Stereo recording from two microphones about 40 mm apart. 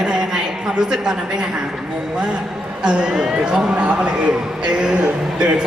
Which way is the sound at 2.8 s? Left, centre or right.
Centre.